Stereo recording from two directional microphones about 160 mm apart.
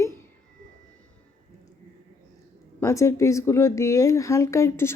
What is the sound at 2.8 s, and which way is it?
Speech, 15° left (ahead or behind).